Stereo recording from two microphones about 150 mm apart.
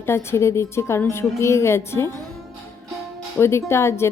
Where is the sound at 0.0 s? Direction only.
15° left (ahead or behind).